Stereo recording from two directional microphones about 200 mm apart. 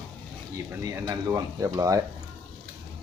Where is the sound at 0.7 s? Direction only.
15° right (ahead or behind).